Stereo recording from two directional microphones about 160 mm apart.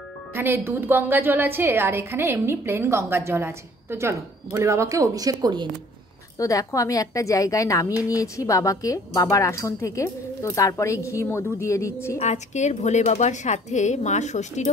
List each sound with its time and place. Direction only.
0.3 s a woman's voice: 15° right (ahead or behind)
6.3 s a woman's voice: 20° left (ahead or behind)
12.2 s speech: 45° left (ahead or behind)